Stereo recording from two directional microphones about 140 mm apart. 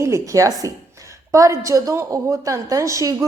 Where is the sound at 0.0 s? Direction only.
20° right (ahead or behind).